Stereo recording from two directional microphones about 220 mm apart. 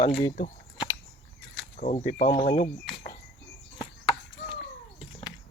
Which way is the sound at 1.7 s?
35° left (ahead or behind).